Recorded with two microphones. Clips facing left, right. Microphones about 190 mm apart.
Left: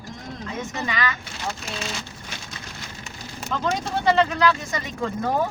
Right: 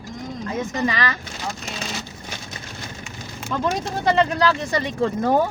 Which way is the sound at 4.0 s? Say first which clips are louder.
Right 1 dB; 35° right (ahead or behind).